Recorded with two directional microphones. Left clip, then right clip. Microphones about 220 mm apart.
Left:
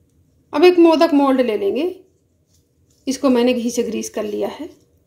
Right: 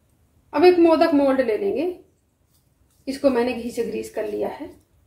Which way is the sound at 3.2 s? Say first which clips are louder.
Left 4 dB; 40° left (ahead or behind).